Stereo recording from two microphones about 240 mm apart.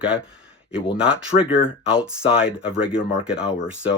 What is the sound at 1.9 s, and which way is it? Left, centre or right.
Speech, centre.